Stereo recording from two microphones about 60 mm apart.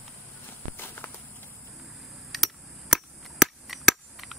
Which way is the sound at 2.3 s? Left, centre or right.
Centre.